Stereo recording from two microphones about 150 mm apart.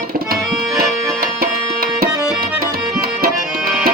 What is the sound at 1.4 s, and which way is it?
Tabla, 90° right.